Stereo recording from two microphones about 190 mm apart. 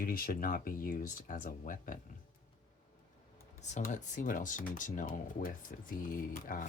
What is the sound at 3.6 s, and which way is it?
Speech, 40° left (ahead or behind).